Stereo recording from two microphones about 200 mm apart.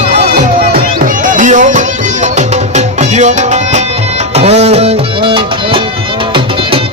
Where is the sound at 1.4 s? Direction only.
40° right (ahead or behind).